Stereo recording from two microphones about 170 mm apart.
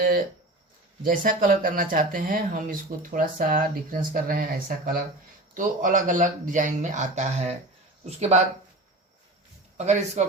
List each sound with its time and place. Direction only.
0.0 s a sound: 55° right (ahead or behind)
1.0 s speech: 55° right (ahead or behind)
5.5 s a man's voice: 50° right (ahead or behind)
9.7 s a man's voice: 40° right (ahead or behind)